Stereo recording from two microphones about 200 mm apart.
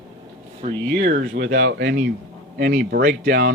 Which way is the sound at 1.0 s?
45° right (ahead or behind).